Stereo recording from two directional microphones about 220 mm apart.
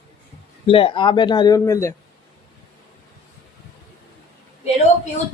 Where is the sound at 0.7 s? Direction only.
25° left (ahead or behind).